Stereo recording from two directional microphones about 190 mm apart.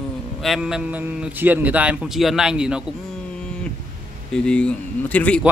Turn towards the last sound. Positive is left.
turn(degrees=5)  # may be behind; listen again after turning